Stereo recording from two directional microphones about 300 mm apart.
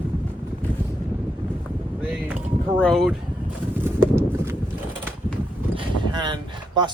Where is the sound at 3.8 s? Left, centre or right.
Centre.